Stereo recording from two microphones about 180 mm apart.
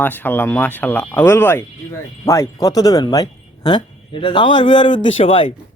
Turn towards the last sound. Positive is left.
turn(degrees=30)  # may be behind; listen again after turning